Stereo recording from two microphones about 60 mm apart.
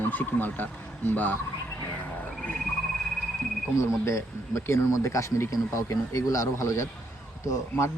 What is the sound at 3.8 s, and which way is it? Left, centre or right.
Speech, left.